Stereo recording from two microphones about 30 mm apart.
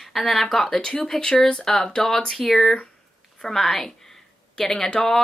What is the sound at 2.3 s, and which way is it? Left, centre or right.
Speech, centre.